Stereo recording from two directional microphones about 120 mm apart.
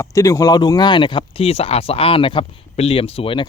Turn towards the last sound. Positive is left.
turn(degrees=50)  # may be behind; listen again after turning